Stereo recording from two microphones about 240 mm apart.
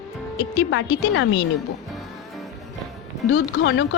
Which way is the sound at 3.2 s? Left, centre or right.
Left.